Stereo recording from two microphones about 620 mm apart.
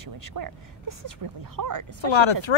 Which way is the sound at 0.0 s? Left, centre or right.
Right.